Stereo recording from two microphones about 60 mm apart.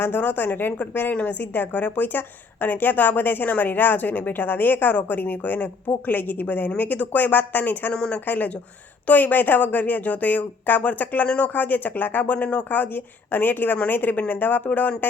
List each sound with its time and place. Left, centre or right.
0.0 s a woman's voice: left
7.9 s speech: centre
8.2 s a woman's voice: left